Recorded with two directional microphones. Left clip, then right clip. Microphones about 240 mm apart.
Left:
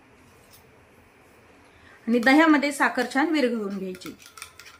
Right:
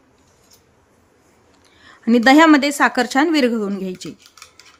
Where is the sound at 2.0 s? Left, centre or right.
Right.